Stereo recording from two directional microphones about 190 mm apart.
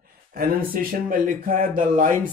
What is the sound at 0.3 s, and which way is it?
Speech, 50° right (ahead or behind).